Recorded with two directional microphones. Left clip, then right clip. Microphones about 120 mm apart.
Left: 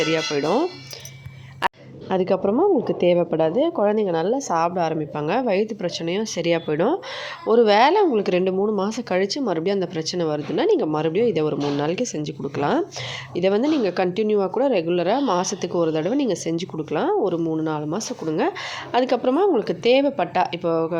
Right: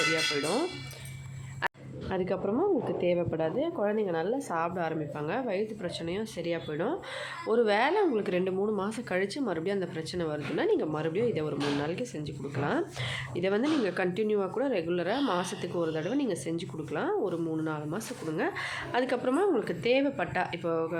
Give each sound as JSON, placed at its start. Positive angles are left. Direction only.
{"t": 0.4, "sound": "speech", "side_deg": 45}
{"t": 1.6, "sound": "a woman's voice", "side_deg": 55}
{"t": 7.4, "sound": "speech", "side_deg": 50}
{"t": 13.3, "sound": "a woman's voice", "side_deg": 45}